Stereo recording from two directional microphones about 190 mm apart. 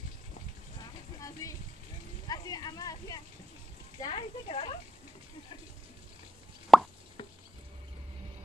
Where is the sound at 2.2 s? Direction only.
20° left (ahead or behind).